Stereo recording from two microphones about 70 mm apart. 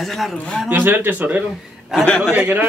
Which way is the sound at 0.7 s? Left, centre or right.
Right.